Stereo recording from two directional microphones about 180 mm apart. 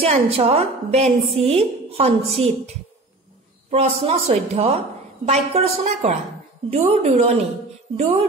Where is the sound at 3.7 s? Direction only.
35° right (ahead or behind).